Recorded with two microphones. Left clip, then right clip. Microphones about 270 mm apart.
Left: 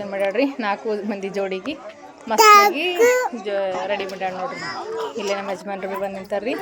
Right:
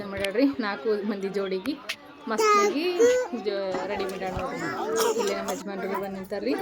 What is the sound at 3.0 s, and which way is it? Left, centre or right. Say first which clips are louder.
Speech: left 5 dB; left.